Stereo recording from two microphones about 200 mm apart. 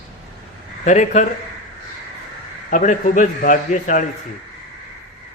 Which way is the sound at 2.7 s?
40° left (ahead or behind).